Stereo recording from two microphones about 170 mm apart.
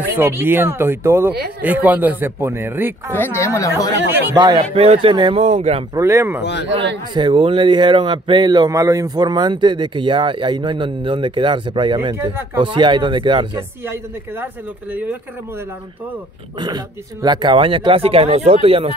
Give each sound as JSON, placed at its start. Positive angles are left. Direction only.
{"t": 0.1, "sound": "a man's voice", "side_deg": -15}
{"t": 3.1, "sound": "a woman's voice", "side_deg": 10}
{"t": 4.4, "sound": "speech", "side_deg": -25}
{"t": 4.7, "sound": "speech", "side_deg": -35}
{"t": 5.9, "sound": "a man's voice", "side_deg": -15}
{"t": 7.2, "sound": "speech", "side_deg": -30}
{"t": 13.8, "sound": "a man's voice", "side_deg": -15}
{"t": 16.5, "sound": "speech", "side_deg": -25}